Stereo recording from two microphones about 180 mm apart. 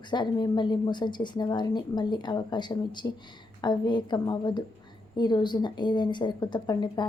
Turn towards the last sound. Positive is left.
turn(degrees=25)  # may be behind; listen again after turning